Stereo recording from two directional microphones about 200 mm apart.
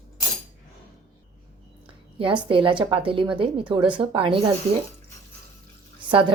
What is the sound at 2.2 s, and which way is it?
A woman's voice, 25° right (ahead or behind).